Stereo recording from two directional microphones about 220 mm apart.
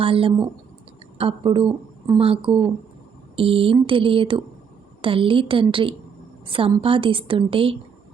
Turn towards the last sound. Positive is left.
turn(degrees=-25)  # may be behind; listen again after turning